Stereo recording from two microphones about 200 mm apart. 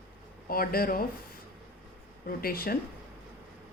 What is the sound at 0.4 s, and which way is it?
Speech, 45° left (ahead or behind).